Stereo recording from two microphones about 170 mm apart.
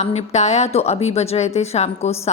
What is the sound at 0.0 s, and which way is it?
Speech, 40° left (ahead or behind).